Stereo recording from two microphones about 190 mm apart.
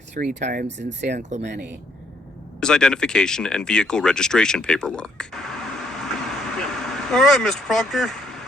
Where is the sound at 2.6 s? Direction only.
5° left (ahead or behind).